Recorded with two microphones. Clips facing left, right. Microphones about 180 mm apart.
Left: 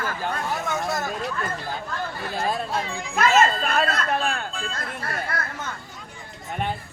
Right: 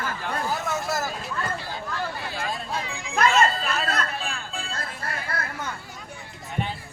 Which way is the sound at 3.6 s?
55° left (ahead or behind).